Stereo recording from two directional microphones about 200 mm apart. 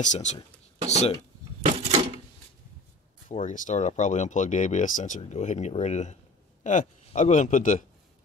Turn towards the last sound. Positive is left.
turn(degrees=40)  # may be behind; listen again after turning